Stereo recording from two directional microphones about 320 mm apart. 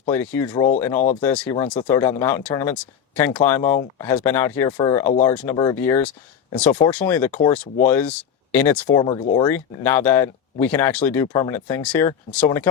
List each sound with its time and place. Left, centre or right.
0.1 s speech: centre